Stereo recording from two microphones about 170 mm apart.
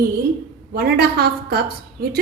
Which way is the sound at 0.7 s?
70° right (ahead or behind).